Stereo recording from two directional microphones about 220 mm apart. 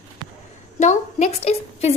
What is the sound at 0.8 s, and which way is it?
A woman's voice, 35° left (ahead or behind).